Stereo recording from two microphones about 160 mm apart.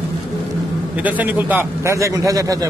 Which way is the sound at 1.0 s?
10° right (ahead or behind).